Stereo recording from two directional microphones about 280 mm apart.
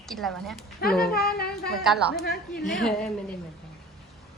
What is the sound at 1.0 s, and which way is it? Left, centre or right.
Speech, left.